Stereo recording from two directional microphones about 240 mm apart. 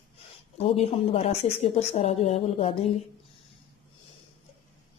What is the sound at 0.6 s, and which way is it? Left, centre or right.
A woman's voice, left.